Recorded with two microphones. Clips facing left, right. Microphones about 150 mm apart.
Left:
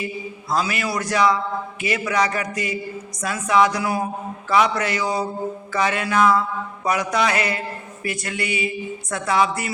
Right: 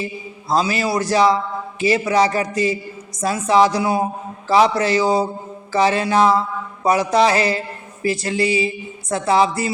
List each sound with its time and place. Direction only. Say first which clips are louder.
0.0 s a man's voice: right 1 dB; 30° right (ahead or behind)